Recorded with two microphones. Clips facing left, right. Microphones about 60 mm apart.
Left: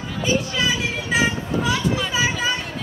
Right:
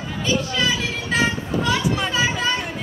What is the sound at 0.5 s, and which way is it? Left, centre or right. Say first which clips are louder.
Children playing: even; centre.